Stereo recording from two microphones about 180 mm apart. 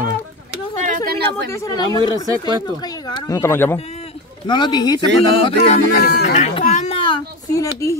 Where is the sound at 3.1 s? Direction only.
15° left (ahead or behind).